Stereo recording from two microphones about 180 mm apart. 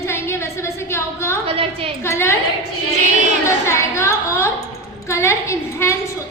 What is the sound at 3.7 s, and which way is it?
A woman's voice, 15° left (ahead or behind).